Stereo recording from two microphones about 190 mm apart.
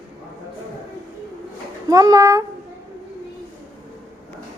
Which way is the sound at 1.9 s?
20° right (ahead or behind).